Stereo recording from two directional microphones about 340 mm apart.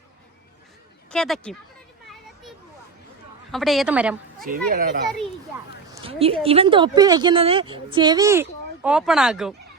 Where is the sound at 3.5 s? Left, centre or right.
Centre.